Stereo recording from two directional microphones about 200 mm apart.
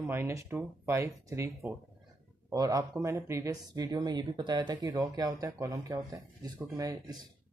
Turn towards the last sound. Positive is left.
turn(degrees=-15)  # may be behind; listen again after turning